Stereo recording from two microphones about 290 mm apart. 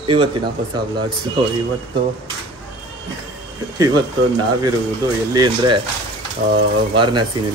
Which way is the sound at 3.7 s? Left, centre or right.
Centre.